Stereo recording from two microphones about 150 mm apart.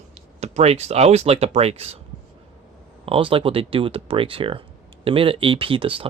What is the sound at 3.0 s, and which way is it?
Speech, 35° right (ahead or behind).